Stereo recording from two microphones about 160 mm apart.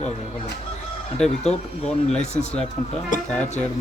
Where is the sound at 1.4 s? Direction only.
45° left (ahead or behind).